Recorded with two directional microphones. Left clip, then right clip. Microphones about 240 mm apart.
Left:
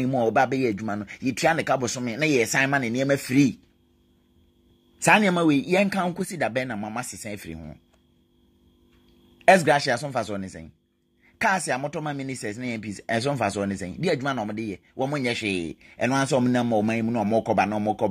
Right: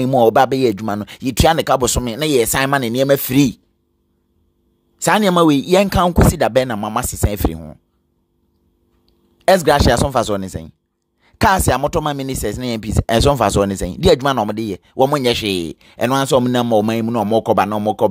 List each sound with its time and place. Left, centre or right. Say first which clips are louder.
0.0 s speech: right 10 dB; right
5.0 s speech: right 4 dB; right
5.3 s speech: right 9 dB; right
9.6 s speech: right 8 dB; right